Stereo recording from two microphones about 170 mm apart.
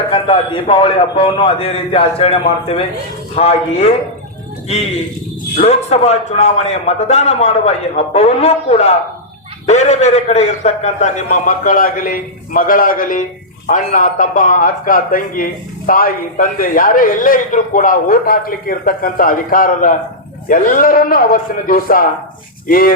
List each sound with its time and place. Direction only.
0.1 s a man's voice: 30° left (ahead or behind)
5.5 s a man's voice: 40° left (ahead or behind); by 22.9 s 60° left (ahead or behind)